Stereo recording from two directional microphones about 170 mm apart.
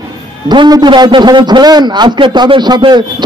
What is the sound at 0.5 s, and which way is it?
A man's voice, 25° right (ahead or behind).